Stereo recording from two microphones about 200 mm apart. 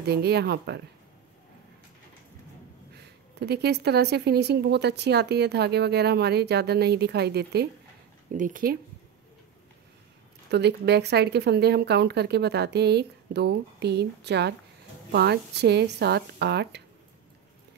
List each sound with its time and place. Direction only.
0.0 s speech: 55° right (ahead or behind)
2.9 s speech: 55° right (ahead or behind)
8.4 s speech: 40° right (ahead or behind)
10.5 s speech: 55° right (ahead or behind)